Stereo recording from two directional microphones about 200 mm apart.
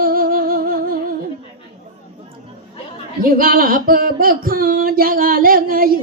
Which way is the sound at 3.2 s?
45° right (ahead or behind).